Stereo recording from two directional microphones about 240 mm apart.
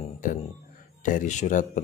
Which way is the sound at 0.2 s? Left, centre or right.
Left.